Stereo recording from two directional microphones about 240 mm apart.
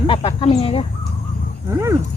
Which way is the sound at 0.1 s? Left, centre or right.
Left.